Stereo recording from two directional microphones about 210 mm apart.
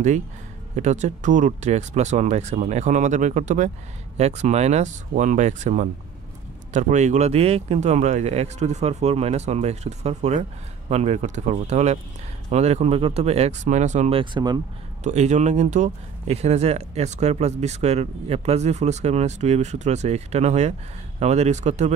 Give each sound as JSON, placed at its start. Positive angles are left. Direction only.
{"t": 0.7, "sound": "speech", "side_deg": -35}
{"t": 15.0, "sound": "speech", "side_deg": -35}